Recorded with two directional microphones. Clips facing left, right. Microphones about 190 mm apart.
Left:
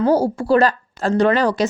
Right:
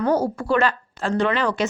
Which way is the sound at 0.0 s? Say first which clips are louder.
Left 4 dB; 30° left (ahead or behind).